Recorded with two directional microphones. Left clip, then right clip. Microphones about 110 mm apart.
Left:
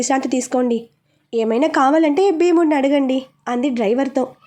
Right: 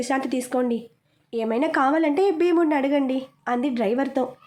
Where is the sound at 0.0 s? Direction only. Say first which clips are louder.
Left 6 dB; 45° left (ahead or behind).